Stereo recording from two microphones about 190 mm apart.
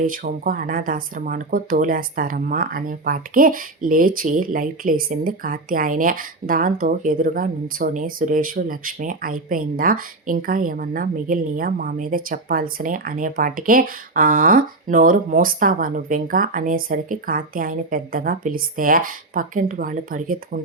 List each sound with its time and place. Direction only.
0.0 s speech: 45° right (ahead or behind)